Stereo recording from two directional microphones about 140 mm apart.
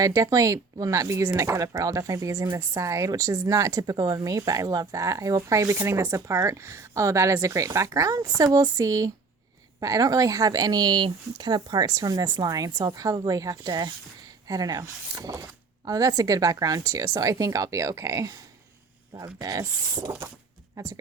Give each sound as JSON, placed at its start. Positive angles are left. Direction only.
{"t": 0.0, "sound": "speech", "side_deg": -25}